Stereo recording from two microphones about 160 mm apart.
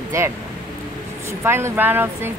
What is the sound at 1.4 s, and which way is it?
Speech, 15° right (ahead or behind).